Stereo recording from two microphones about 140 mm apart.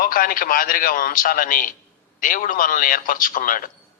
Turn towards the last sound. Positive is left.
turn(degrees=75)  # may be behind; listen again after turning